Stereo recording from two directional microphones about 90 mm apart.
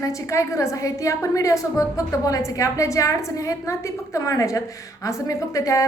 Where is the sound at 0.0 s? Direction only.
35° left (ahead or behind).